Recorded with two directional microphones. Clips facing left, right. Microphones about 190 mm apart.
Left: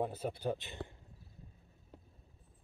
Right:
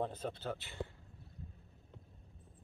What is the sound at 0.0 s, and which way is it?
Speech, 10° left (ahead or behind).